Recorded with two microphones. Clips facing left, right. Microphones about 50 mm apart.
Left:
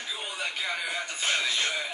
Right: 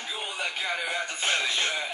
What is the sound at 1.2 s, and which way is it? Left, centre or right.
Music, right.